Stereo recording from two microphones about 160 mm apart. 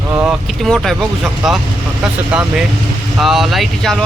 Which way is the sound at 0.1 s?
10° right (ahead or behind).